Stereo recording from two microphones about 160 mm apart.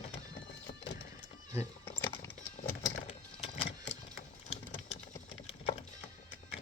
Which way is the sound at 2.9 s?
45° left (ahead or behind).